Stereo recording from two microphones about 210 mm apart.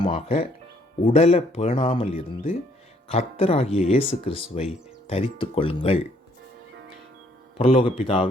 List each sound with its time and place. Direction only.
0.0 s speech: 30° left (ahead or behind)
7.6 s speech: 25° left (ahead or behind)